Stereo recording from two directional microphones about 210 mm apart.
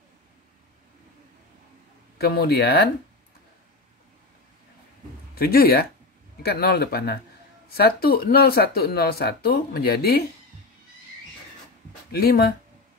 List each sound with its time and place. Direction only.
2.1 s speech: 50° left (ahead or behind)
5.3 s speech: 45° left (ahead or behind)
12.1 s speech: 50° left (ahead or behind)